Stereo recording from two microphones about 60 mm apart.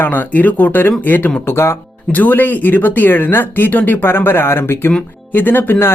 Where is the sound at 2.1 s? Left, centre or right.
Left.